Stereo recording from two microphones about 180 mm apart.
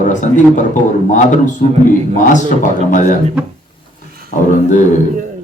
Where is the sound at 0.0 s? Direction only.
45° left (ahead or behind).